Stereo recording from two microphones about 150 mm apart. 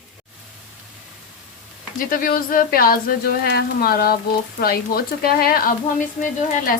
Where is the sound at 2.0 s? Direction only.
65° left (ahead or behind).